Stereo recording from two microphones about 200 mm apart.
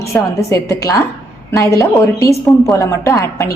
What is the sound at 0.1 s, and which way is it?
A woman's voice, 5° left (ahead or behind).